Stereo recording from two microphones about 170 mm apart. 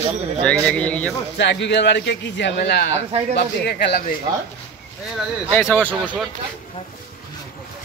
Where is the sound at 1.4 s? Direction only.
90° left; by 2.9 s 75° left (ahead or behind).